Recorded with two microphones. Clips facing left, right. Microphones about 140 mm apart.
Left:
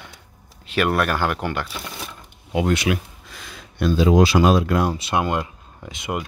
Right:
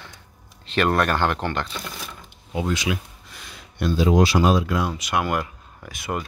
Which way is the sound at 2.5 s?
75° left (ahead or behind).